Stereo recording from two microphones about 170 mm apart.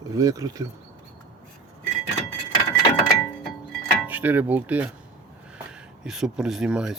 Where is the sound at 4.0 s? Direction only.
10° right (ahead or behind).